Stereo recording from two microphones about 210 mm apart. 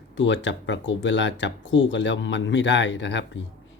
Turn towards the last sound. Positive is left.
turn(degrees=60)  # may be behind; listen again after turning